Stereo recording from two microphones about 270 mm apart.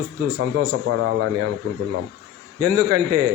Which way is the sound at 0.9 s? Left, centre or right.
Right.